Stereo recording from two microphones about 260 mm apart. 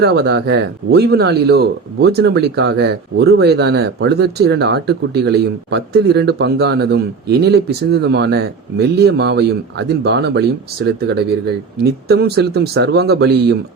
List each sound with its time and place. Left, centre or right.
0.0 s speech: right